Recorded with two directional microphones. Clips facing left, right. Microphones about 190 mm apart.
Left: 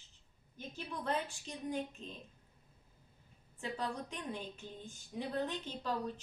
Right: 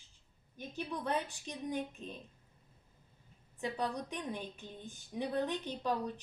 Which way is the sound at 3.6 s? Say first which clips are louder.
Right 3 dB; 15° right (ahead or behind).